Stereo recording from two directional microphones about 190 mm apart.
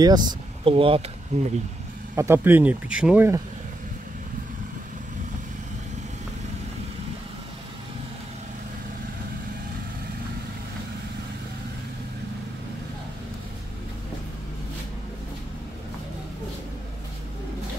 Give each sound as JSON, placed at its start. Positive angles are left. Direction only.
{"t": 0.0, "sound": "speech", "side_deg": -20}
{"t": 2.1, "sound": "speech", "side_deg": -10}